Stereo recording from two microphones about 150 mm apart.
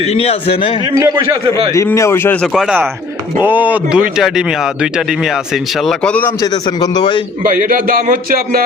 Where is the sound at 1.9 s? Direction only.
20° left (ahead or behind).